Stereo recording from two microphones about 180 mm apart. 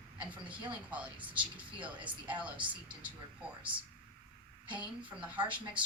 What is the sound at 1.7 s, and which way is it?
Speech, 10° right (ahead or behind).